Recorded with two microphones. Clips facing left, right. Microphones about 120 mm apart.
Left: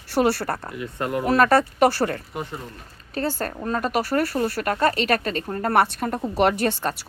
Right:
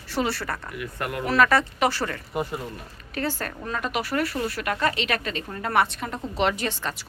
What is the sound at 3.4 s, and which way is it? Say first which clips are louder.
Speech: left 5 dB; 35° left (ahead or behind).